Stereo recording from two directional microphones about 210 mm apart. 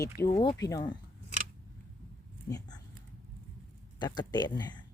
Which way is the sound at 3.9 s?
20° left (ahead or behind).